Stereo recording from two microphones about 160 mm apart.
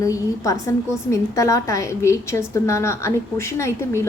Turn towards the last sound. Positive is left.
turn(degrees=15)  # may be behind; listen again after turning